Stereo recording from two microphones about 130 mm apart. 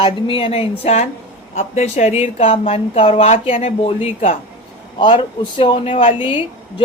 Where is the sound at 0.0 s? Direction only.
40° left (ahead or behind).